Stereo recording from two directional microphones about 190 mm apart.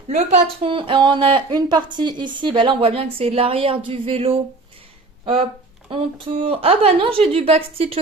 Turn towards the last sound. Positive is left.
turn(degrees=-30)  # may be behind; listen again after turning